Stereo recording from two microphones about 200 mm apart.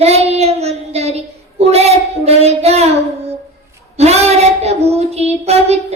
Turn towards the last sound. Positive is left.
turn(degrees=-30)  # may be behind; listen again after turning